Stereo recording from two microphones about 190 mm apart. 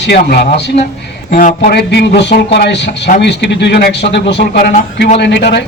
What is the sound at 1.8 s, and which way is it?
Speech, 60° left (ahead or behind).